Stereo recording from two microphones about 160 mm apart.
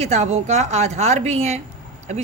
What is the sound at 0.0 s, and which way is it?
Speech, 40° right (ahead or behind).